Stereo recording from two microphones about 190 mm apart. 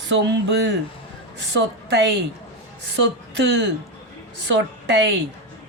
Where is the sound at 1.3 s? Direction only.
65° right (ahead or behind).